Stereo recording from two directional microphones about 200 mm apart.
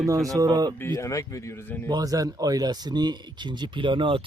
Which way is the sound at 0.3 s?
20° right (ahead or behind).